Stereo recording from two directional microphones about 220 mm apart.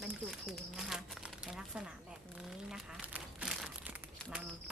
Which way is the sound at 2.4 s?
Centre (ahead or behind).